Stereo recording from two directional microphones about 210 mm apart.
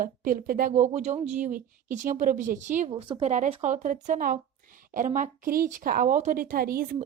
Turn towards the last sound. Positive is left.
turn(degrees=-45)  # may be behind; listen again after turning